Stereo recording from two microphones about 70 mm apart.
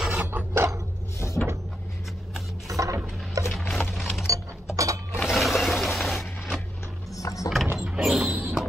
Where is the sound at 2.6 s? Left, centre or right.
Right.